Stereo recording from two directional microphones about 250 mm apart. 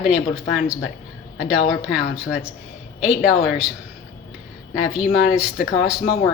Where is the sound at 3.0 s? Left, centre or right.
Centre.